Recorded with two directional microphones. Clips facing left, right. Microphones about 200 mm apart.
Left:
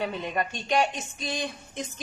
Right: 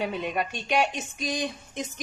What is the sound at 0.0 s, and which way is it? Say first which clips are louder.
A woman's voice: right 1 dB; 10° right (ahead or behind).